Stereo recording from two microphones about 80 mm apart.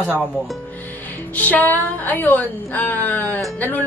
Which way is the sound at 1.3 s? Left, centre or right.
Centre.